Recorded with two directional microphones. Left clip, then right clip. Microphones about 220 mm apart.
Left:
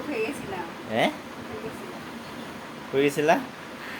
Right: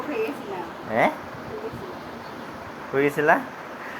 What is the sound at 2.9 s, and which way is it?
Speech, 10° left (ahead or behind).